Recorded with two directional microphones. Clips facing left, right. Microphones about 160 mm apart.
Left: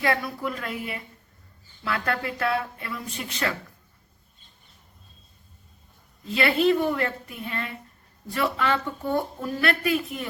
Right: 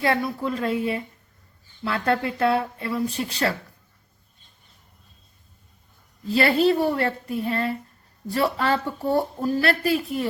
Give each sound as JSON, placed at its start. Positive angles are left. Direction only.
{"t": 0.0, "sound": "speech", "side_deg": -30}
{"t": 6.3, "sound": "speech", "side_deg": -35}